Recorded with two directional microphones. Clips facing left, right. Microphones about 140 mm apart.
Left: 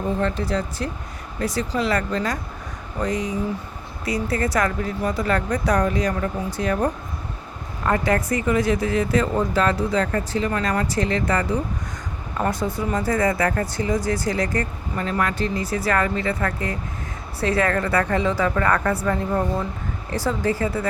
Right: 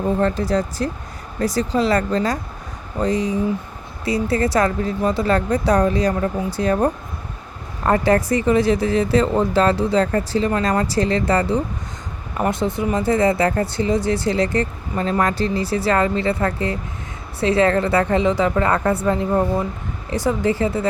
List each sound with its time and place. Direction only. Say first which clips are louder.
0.2 s speech: right 4 dB; 40° right (ahead or behind); by 20.8 s 25° right (ahead or behind)